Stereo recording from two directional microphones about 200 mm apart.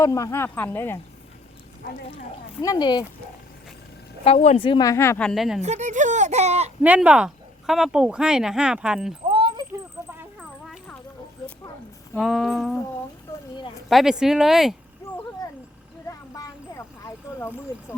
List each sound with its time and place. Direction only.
0.0 s speech: 15° left (ahead or behind)
2.6 s speech: 20° left (ahead or behind)
4.2 s speech: 30° left (ahead or behind); by 5.6 s centre (ahead or behind)
5.6 s speech: 35° right (ahead or behind)
6.8 s speech: 5° right (ahead or behind)
9.3 s a sound: 25° right (ahead or behind)
12.1 s speech: centre (ahead or behind)
13.9 s speech: centre (ahead or behind)
16.0 s a sound: 15° left (ahead or behind)